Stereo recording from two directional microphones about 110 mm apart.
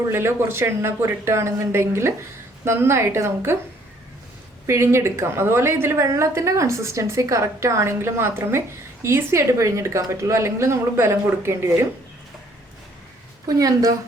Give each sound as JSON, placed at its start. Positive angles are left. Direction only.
{"t": 0.1, "sound": "a woman's voice", "side_deg": -25}
{"t": 4.6, "sound": "a woman's voice", "side_deg": -25}
{"t": 13.6, "sound": "speech", "side_deg": -35}